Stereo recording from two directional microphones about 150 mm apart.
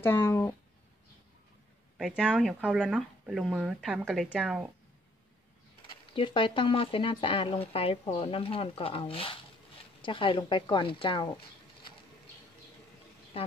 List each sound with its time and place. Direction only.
0.0 s speech: 15° left (ahead or behind)
2.0 s speech: centre (ahead or behind)
6.1 s speech: 35° left (ahead or behind)